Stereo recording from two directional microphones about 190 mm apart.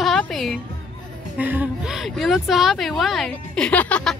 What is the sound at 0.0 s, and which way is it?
Music, centre (ahead or behind).